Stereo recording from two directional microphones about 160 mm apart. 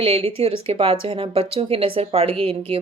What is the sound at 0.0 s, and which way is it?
Speech, 35° right (ahead or behind).